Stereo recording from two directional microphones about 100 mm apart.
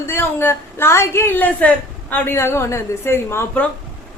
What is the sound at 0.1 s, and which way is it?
A woman's voice, 20° left (ahead or behind).